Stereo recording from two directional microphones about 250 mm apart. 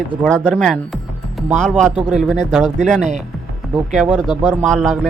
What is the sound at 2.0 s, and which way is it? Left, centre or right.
Speech, right.